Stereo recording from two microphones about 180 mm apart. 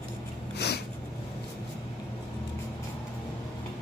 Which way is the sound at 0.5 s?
65° left (ahead or behind).